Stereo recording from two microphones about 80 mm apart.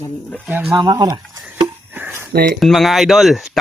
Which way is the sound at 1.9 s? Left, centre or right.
Right.